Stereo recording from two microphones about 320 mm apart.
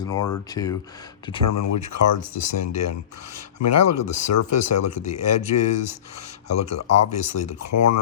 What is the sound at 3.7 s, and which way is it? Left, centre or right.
Speech, left.